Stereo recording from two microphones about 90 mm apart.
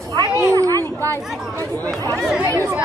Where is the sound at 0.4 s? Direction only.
35° right (ahead or behind).